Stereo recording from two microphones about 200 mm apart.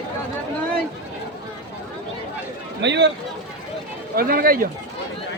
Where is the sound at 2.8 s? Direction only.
60° right (ahead or behind).